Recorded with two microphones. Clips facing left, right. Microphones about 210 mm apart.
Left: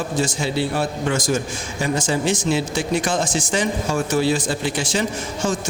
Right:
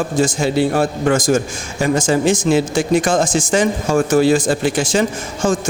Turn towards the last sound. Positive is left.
turn(degrees=-50)  # may be behind; listen again after turning